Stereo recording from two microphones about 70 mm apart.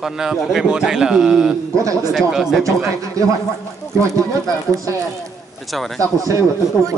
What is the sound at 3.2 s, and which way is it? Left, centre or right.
Speech, right.